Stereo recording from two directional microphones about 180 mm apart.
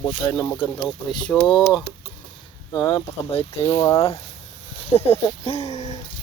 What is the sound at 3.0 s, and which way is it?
Speech, 35° left (ahead or behind).